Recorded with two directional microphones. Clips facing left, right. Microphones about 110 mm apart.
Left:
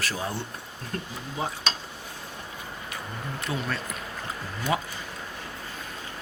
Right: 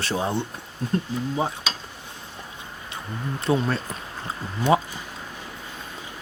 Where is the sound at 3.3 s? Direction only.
30° right (ahead or behind).